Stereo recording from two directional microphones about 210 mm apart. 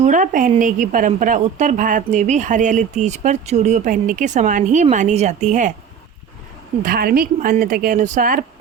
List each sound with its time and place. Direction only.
0.0 s a woman's voice: 40° right (ahead or behind)
6.8 s a woman's voice: 45° right (ahead or behind)